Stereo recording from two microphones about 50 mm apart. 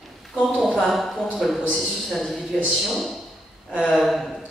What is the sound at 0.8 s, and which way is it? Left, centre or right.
Speech, centre.